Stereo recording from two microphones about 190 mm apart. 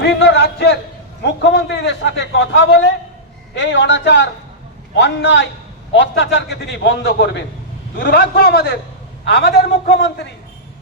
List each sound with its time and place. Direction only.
0.0 s a man's voice: 65° left (ahead or behind)